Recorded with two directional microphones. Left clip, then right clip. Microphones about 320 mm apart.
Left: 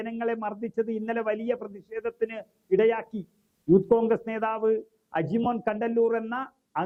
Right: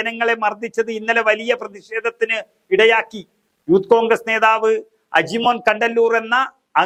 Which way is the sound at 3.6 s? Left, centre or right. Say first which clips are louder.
Right 6 dB; right.